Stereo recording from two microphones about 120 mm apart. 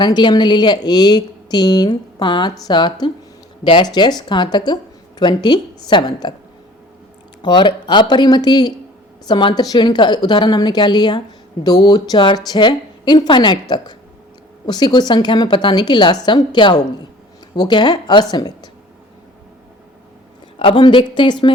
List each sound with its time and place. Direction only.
0.0 s a woman's voice: 40° left (ahead or behind)
7.4 s a woman's voice: 40° left (ahead or behind)
20.6 s a woman's voice: 45° left (ahead or behind)